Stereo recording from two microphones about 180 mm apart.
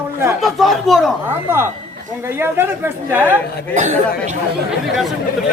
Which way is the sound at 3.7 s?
40° right (ahead or behind).